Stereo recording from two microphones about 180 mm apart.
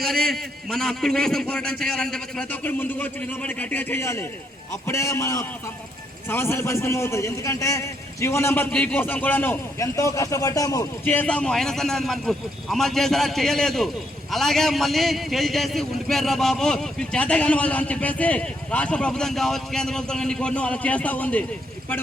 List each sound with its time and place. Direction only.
0.0 s a man's voice: centre (ahead or behind); by 10.8 s 20° left (ahead or behind)
11.0 s a man's voice: 10° left (ahead or behind)